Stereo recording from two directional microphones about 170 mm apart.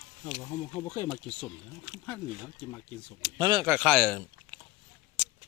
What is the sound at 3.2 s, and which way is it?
Speech, 25° right (ahead or behind).